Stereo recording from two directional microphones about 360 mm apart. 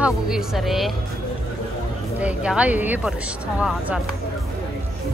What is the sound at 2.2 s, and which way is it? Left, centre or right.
Speech, centre.